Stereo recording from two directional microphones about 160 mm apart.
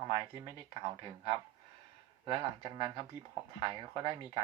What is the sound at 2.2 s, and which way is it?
Speech, 30° right (ahead or behind).